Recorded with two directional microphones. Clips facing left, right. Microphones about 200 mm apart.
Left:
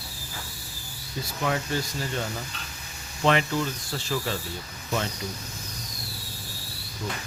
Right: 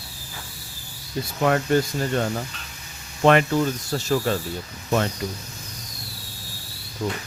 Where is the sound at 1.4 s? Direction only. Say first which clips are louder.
Right 8 dB; 55° right (ahead or behind).